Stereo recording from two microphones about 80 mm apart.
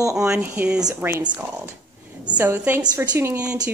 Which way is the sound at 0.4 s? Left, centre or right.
Right.